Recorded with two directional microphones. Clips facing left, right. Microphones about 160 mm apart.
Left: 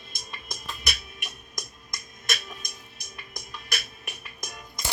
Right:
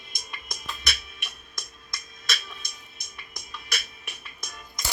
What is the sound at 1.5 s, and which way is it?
Music, 45° left (ahead or behind).